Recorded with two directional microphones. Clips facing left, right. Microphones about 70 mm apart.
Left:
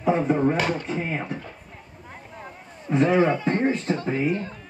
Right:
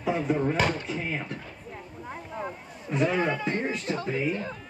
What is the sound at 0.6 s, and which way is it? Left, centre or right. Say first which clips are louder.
Speech: left 1 dB; centre.